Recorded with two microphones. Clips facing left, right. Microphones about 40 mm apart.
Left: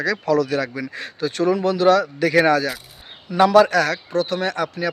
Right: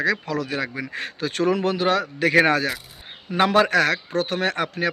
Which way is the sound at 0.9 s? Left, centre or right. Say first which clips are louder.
Left 2 dB; right.